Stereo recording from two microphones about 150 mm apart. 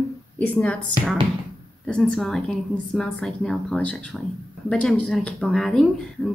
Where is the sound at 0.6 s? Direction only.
10° left (ahead or behind).